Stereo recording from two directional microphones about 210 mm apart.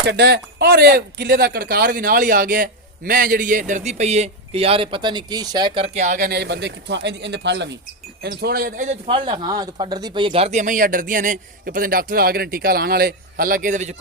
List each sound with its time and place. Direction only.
0.0 s speech: 55° right (ahead or behind); by 9.0 s 35° right (ahead or behind)
9.0 s speech: 20° right (ahead or behind)